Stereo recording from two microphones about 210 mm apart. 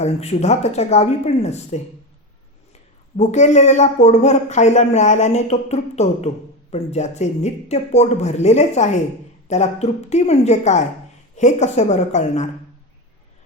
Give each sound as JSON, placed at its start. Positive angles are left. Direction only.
{"t": 0.0, "sound": "speech", "side_deg": 30}
{"t": 3.2, "sound": "speech", "side_deg": 35}